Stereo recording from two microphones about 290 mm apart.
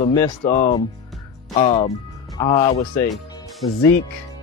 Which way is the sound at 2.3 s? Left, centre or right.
Centre.